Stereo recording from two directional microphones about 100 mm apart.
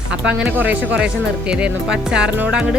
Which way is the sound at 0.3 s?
10° right (ahead or behind).